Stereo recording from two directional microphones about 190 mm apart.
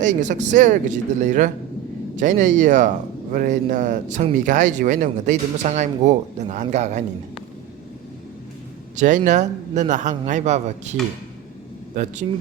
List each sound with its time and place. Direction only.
0.0 s speech: 40° right (ahead or behind)
9.0 s speech: 40° right (ahead or behind)
12.0 s speech: 40° right (ahead or behind)